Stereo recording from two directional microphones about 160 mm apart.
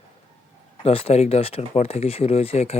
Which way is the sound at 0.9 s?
40° left (ahead or behind).